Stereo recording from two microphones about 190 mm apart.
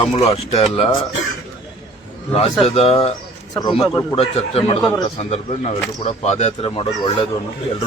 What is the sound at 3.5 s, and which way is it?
A man's voice, 20° left (ahead or behind).